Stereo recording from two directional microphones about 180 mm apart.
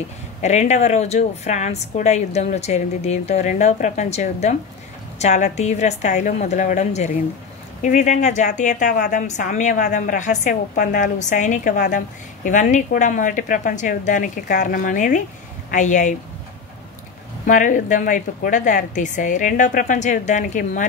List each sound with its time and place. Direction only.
0.4 s a woman's voice: 40° left (ahead or behind)
17.5 s a woman's voice: 45° left (ahead or behind)